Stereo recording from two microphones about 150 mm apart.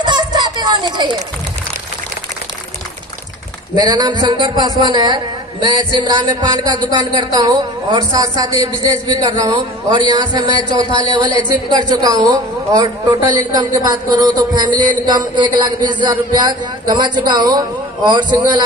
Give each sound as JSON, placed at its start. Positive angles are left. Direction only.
{"t": 0.0, "sound": "children playing", "side_deg": -30}
{"t": 3.7, "sound": "speech", "side_deg": -30}